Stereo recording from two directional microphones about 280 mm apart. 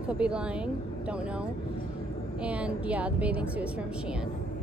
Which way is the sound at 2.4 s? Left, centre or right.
Centre.